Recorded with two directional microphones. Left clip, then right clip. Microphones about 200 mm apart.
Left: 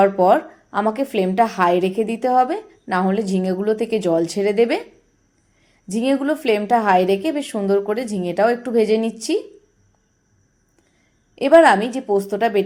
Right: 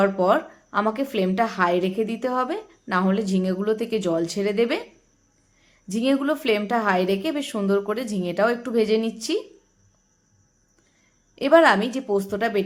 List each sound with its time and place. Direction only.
0.0 s a woman's voice: 10° left (ahead or behind)
11.3 s a woman's voice: 10° left (ahead or behind)